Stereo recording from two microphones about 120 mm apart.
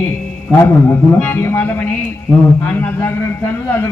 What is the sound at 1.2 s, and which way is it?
A man's voice, 15° left (ahead or behind).